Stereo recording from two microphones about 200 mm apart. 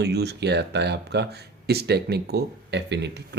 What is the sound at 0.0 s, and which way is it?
Speech, 55° right (ahead or behind).